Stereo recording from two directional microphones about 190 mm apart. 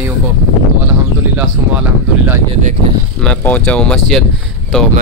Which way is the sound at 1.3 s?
10° right (ahead or behind).